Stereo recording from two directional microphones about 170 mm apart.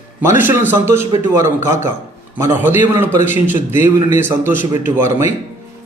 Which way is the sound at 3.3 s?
45° left (ahead or behind).